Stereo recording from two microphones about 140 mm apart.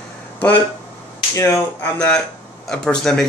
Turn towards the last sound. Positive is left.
turn(degrees=5)  # may be behind; listen again after turning